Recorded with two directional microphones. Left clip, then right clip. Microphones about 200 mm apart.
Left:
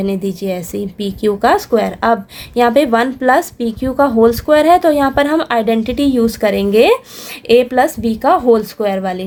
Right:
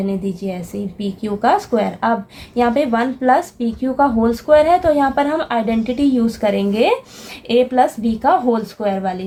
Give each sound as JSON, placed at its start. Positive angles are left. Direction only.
{"t": 0.0, "sound": "a woman's voice", "side_deg": 45}